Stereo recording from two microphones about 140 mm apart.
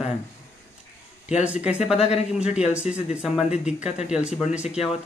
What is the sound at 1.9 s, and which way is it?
Speech, 45° left (ahead or behind).